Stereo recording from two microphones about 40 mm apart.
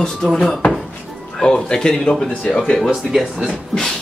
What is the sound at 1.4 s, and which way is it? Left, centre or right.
Speech, centre.